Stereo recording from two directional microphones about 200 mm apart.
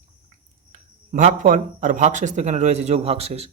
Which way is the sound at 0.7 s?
40° right (ahead or behind).